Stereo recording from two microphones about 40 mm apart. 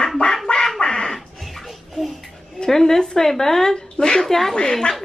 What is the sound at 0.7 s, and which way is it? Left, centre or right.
Duck, left.